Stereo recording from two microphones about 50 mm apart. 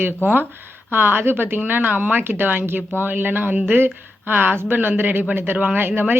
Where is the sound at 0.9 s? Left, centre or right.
Right.